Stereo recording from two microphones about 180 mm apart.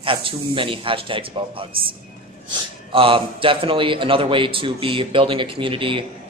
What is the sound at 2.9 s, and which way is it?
A man's voice, 30° right (ahead or behind).